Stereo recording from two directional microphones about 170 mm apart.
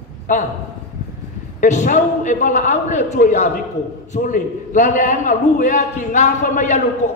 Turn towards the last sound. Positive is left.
turn(degrees=45)  # may be behind; listen again after turning